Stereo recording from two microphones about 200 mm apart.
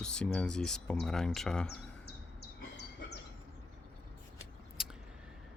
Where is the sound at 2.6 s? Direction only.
55° left (ahead or behind).